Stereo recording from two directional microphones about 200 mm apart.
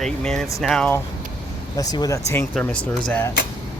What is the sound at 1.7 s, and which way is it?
Speech, 20° left (ahead or behind).